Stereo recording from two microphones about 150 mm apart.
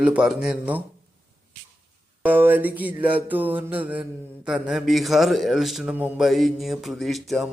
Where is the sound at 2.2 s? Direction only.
10° right (ahead or behind).